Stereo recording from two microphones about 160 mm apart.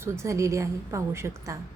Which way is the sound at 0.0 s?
20° right (ahead or behind).